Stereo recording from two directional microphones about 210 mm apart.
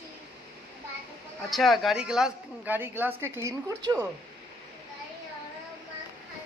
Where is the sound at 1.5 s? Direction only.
Centre (ahead or behind).